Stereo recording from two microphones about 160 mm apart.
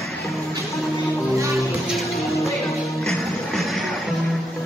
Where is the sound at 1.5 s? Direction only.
Centre (ahead or behind).